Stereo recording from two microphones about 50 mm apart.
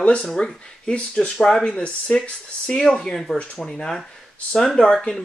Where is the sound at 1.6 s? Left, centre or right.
Left.